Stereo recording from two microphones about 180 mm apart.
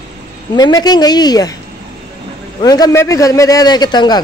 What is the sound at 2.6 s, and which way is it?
A man's voice, 20° left (ahead or behind).